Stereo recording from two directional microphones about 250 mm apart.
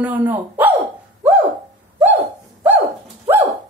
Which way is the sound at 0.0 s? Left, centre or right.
Centre.